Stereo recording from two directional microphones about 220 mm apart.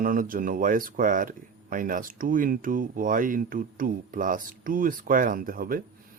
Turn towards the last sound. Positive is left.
turn(degrees=-40)  # may be behind; listen again after turning